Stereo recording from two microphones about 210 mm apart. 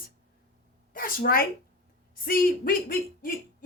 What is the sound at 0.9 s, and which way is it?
A woman's voice, 45° left (ahead or behind).